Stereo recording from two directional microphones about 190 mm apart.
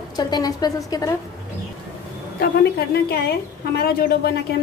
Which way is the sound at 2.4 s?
55° left (ahead or behind).